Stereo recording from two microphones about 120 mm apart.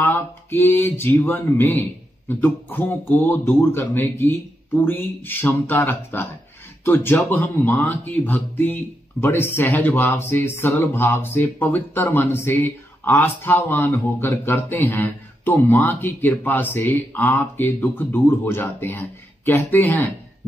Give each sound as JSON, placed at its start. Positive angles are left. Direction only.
{"t": 0.0, "sound": "speech", "side_deg": 20}